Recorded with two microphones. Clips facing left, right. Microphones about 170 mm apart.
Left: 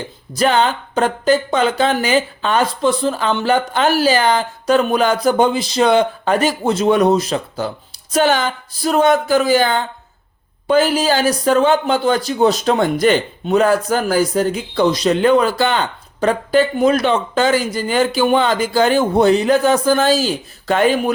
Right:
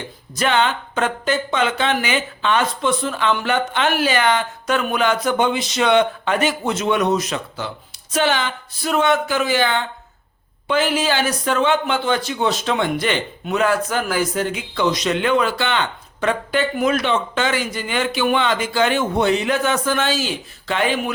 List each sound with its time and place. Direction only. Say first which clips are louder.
0.3 s speech: left 4 dB; 35° left (ahead or behind)